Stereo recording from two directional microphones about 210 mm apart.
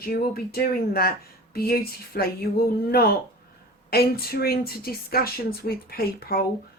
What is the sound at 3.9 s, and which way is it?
A woman's voice, 45° left (ahead or behind).